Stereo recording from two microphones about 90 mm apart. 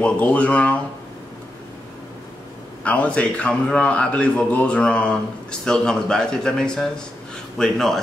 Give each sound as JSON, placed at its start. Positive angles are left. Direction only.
{"t": 0.0, "sound": "a man's voice", "side_deg": 15}
{"t": 2.8, "sound": "a man's voice", "side_deg": 15}